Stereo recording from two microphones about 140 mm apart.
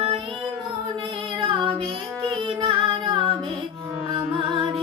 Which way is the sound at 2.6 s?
35° right (ahead or behind).